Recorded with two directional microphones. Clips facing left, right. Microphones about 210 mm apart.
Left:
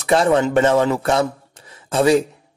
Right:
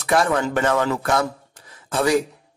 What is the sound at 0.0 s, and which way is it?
A man's voice, 25° left (ahead or behind).